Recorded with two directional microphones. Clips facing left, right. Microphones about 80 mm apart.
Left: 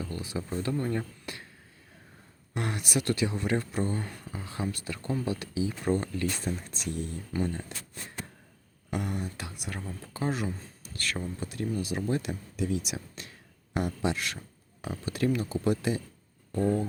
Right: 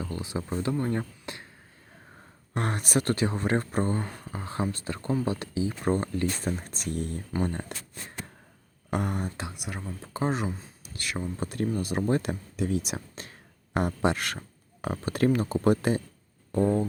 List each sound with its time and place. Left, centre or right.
0.0 s speech: right
2.6 s speech: right
6.6 s speech: right
8.9 s speech: right
9.6 s speech: centre
10.0 s speech: right
10.9 s speech: centre
11.3 s speech: right
16.5 s speech: right